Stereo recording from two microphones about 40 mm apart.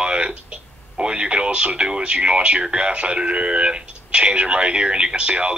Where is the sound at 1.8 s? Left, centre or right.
Right.